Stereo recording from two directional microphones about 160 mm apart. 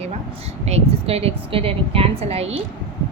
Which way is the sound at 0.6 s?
40° right (ahead or behind).